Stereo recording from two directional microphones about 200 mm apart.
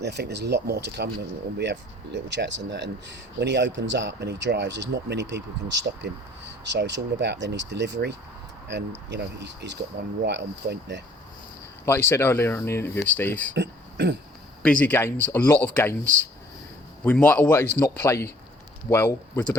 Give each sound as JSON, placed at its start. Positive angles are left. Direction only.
{"t": 0.0, "sound": "speech", "side_deg": -55}
{"t": 11.9, "sound": "speech", "side_deg": 10}
{"t": 13.6, "sound": "speech", "side_deg": -55}
{"t": 14.6, "sound": "speech", "side_deg": 5}
{"t": 17.0, "sound": "speech", "side_deg": 10}